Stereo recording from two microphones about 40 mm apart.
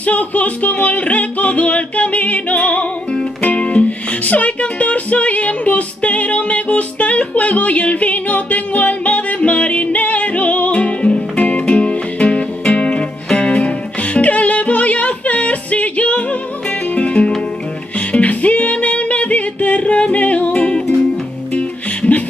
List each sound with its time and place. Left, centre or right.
0.0 s music: left
14.1 s music: left